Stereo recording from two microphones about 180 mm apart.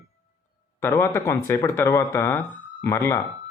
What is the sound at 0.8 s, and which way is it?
Speech, 15° left (ahead or behind).